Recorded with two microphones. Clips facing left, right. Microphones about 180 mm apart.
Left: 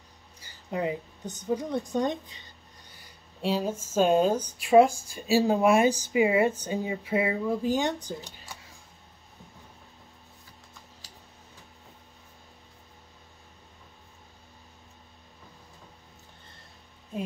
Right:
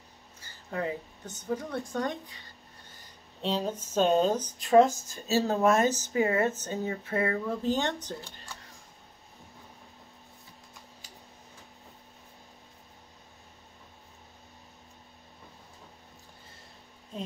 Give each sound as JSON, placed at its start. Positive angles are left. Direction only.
{"t": 0.4, "sound": "a woman's voice", "side_deg": 15}
{"t": 3.0, "sound": "speech", "side_deg": 10}
{"t": 17.1, "sound": "a sound", "side_deg": 10}